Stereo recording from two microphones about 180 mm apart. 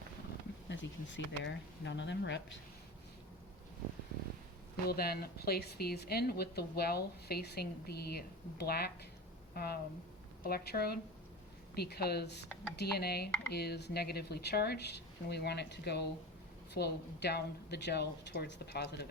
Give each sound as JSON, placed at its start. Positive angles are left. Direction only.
{"t": 0.7, "sound": "speech", "side_deg": 85}
{"t": 4.9, "sound": "speech", "side_deg": 60}